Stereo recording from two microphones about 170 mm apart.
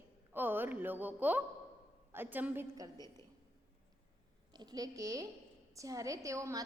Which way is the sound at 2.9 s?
20° left (ahead or behind).